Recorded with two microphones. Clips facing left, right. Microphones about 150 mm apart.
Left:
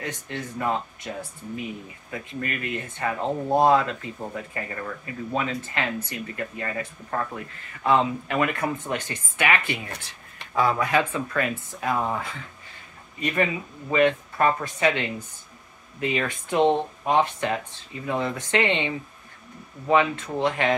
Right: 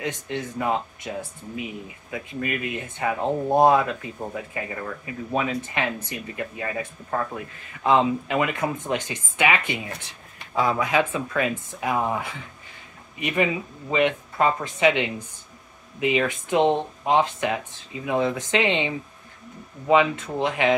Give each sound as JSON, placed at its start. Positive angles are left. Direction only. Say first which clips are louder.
{"t": 0.0, "sound": "speech", "louder": "right 4 dB", "side_deg": -15}
{"t": 19.9, "sound": "speech", "louder": "right 2 dB", "side_deg": -15}